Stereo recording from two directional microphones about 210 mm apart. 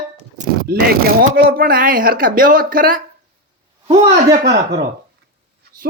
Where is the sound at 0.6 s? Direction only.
45° right (ahead or behind).